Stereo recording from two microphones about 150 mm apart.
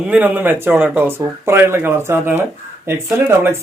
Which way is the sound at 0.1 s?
10° right (ahead or behind).